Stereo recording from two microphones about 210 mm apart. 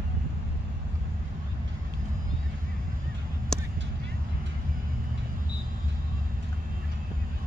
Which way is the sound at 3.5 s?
5° left (ahead or behind).